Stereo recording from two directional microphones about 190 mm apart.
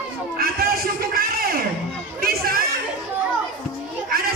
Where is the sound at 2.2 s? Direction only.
50° right (ahead or behind).